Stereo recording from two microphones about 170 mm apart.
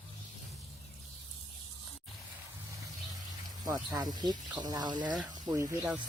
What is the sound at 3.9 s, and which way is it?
Speech, 25° right (ahead or behind).